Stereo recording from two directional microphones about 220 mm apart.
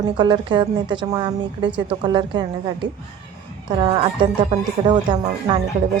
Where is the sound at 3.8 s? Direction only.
20° right (ahead or behind).